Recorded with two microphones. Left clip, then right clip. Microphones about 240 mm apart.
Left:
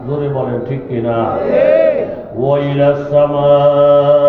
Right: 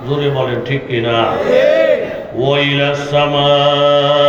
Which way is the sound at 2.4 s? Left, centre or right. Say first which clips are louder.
Even; right.